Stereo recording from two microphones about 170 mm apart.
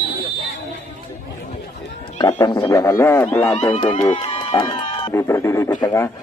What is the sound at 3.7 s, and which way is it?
Speech, 35° left (ahead or behind).